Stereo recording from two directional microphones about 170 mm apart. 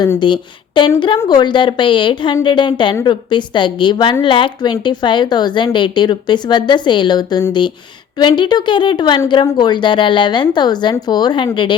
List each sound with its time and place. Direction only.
0.0 s a woman's voice: 25° left (ahead or behind)